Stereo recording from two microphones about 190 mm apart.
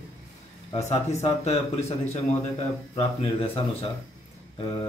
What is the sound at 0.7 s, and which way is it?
Speech, 35° left (ahead or behind).